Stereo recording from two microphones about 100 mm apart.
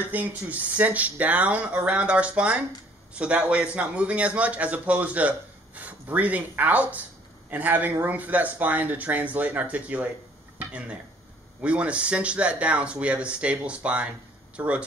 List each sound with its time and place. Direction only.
0.1 s speech: 15° right (ahead or behind)